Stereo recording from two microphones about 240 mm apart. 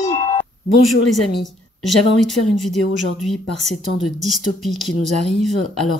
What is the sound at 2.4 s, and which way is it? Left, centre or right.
Speech, left.